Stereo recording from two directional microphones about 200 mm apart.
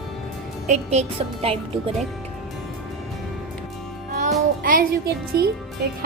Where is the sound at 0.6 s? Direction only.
35° right (ahead or behind).